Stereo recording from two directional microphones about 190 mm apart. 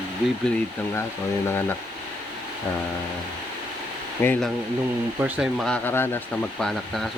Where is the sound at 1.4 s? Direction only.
10° left (ahead or behind).